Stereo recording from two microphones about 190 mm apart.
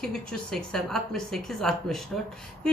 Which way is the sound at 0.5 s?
Centre (ahead or behind).